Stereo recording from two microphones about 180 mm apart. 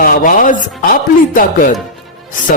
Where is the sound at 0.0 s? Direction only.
50° left (ahead or behind).